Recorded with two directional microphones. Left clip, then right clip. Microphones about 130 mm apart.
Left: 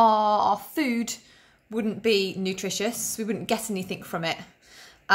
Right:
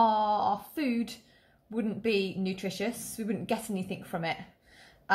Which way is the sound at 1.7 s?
30° left (ahead or behind).